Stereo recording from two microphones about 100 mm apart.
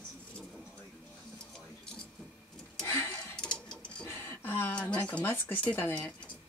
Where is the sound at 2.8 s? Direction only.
30° left (ahead or behind).